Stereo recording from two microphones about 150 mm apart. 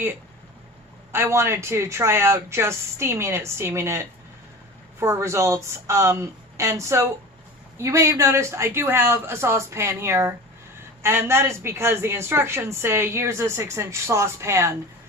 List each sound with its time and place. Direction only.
1.1 s a woman's voice: 15° right (ahead or behind)